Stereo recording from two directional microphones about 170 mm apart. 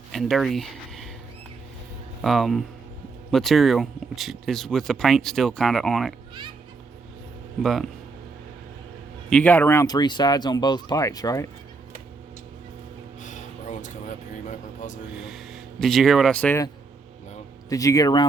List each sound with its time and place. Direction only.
0.1 s speech: centre (ahead or behind)
2.2 s speech: centre (ahead or behind)
7.6 s speech: centre (ahead or behind)
9.3 s speech: 10° left (ahead or behind)
13.2 s a sound: 45° left (ahead or behind)
15.2 s a sound: centre (ahead or behind)
17.7 s speech: 20° left (ahead or behind)